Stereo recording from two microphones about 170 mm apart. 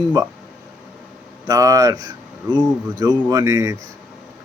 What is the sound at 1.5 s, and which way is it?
Speech, 20° right (ahead or behind).